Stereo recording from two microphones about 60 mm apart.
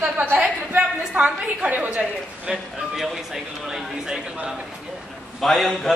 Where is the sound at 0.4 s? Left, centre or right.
Centre.